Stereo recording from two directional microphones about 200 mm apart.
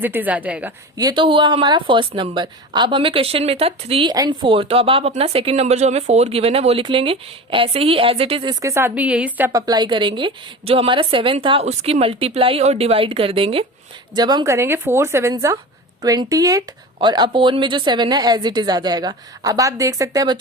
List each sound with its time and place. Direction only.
0.0 s a woman's voice: 10° right (ahead or behind)
0.9 s speech: 20° right (ahead or behind)
8.6 s a woman's voice: 10° right (ahead or behind)
9.5 s a woman's voice: 20° right (ahead or behind)